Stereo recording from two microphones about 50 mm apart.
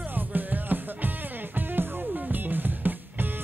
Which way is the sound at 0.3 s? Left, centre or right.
Right.